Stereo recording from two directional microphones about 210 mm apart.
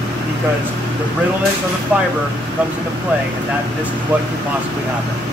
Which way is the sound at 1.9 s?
5° right (ahead or behind).